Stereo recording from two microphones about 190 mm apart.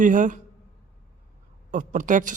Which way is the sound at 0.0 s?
45° right (ahead or behind).